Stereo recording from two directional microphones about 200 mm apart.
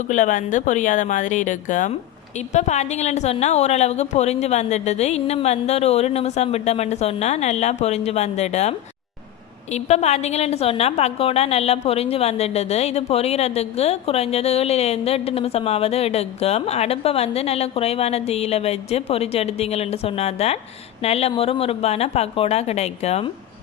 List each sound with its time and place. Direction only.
0.1 s a woman's voice: 40° left (ahead or behind)
9.7 s a woman's voice: 35° left (ahead or behind)